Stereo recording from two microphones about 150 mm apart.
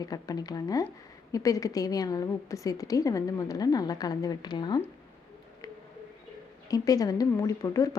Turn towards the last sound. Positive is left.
turn(degrees=20)  # may be behind; listen again after turning